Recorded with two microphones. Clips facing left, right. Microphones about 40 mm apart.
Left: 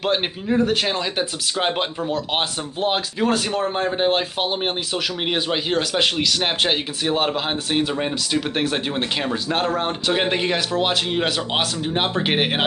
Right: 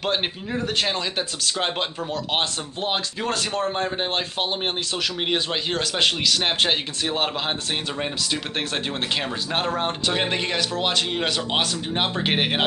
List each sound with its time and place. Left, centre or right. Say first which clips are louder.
0.0 s speech: left 3 dB; centre